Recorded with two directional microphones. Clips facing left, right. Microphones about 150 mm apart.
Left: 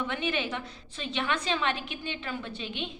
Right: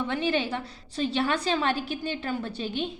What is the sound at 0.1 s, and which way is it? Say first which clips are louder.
A woman's voice: right 4 dB; 35° right (ahead or behind).